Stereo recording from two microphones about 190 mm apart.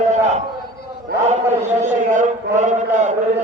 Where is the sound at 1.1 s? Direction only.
60° right (ahead or behind).